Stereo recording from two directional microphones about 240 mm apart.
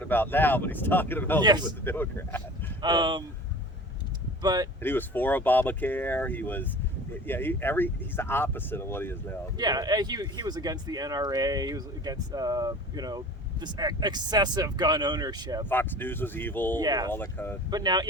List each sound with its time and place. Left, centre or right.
0.0 s speech: centre
1.4 s speech: centre
1.8 s speech: centre
2.8 s speech: centre
4.4 s speech: centre
4.8 s speech: centre
9.6 s speech: centre
15.7 s speech: centre
16.8 s speech: centre
17.1 s speech: centre
17.7 s speech: centre